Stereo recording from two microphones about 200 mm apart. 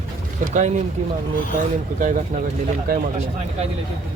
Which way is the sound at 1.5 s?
40° right (ahead or behind).